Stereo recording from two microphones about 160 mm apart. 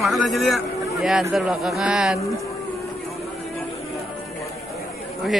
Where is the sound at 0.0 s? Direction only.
Centre (ahead or behind).